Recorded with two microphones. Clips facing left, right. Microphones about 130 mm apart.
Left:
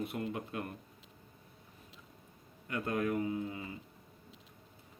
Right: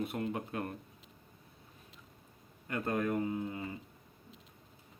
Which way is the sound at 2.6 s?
35° right (ahead or behind).